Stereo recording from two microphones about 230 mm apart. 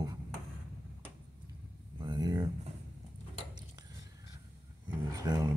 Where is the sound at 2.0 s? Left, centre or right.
Centre.